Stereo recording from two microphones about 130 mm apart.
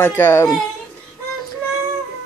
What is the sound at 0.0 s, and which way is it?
Speech, 20° left (ahead or behind).